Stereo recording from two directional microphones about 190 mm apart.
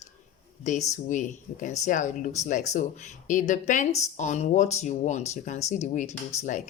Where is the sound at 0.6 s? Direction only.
40° left (ahead or behind).